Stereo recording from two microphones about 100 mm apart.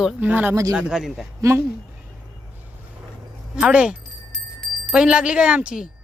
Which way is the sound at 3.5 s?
10° right (ahead or behind).